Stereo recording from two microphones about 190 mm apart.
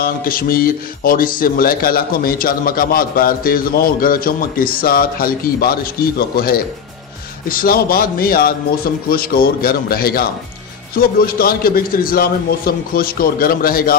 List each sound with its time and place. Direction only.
0.0 s speech: 50° left (ahead or behind)